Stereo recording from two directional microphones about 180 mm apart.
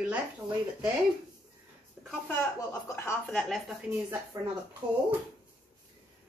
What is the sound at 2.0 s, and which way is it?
Speech, centre (ahead or behind).